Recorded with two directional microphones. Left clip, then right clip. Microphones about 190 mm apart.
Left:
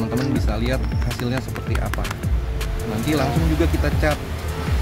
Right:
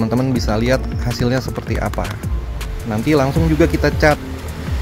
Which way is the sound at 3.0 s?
35° right (ahead or behind).